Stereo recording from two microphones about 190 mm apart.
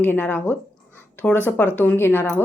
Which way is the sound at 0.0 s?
10° left (ahead or behind).